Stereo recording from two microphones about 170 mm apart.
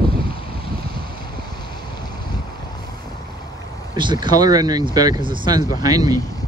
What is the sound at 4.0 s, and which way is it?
Speech, 25° right (ahead or behind).